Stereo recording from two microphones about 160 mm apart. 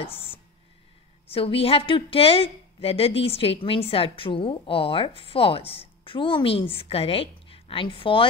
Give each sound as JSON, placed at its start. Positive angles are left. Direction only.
{"t": 1.3, "sound": "a woman's voice", "side_deg": 35}